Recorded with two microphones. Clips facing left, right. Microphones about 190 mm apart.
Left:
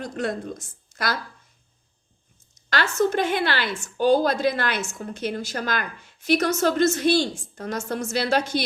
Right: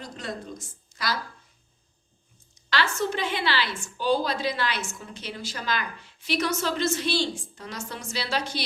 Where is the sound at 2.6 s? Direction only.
45° left (ahead or behind).